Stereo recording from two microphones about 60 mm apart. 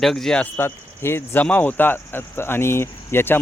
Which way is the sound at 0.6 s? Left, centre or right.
Left.